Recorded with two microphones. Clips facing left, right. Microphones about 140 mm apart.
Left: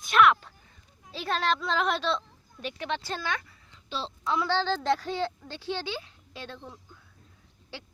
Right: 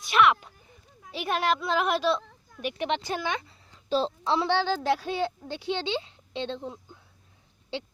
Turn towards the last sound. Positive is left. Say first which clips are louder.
# right 8 dB
turn(degrees=-20)  # may be behind; listen again after turning